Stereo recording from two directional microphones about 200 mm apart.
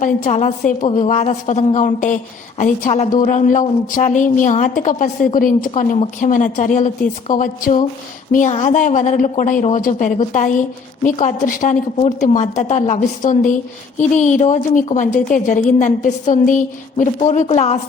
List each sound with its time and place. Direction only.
0.0 s a woman's voice: 35° left (ahead or behind)